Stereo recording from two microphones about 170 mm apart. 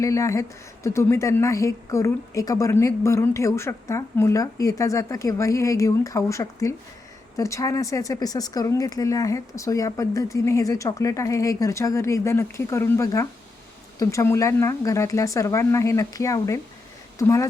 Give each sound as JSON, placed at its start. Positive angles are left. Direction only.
{"t": 0.0, "sound": "speech", "side_deg": 20}